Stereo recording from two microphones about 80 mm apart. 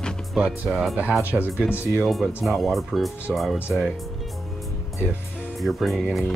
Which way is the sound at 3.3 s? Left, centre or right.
Centre.